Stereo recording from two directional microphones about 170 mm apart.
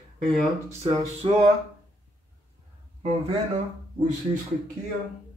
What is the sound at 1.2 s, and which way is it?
Speech, 35° right (ahead or behind).